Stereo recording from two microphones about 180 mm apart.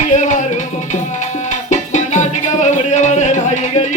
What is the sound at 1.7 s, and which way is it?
Music, 40° left (ahead or behind).